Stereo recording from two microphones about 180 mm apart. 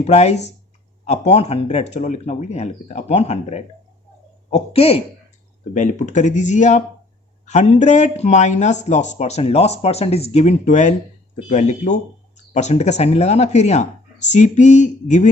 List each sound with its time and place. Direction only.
0.0 s speech: 35° left (ahead or behind)
5.7 s speech: 45° left (ahead or behind)